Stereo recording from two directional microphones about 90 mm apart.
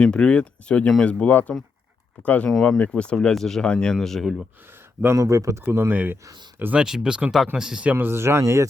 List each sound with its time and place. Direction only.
0.0 s speech: 10° left (ahead or behind)
5.1 s speech: 40° right (ahead or behind); by 6.8 s 20° right (ahead or behind)
6.8 s speech: 5° right (ahead or behind)
7.9 s speech: 25° right (ahead or behind)